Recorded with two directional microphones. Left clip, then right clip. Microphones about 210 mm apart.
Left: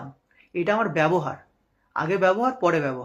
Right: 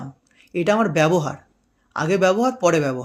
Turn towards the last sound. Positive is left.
turn(degrees=-40)  # may be behind; listen again after turning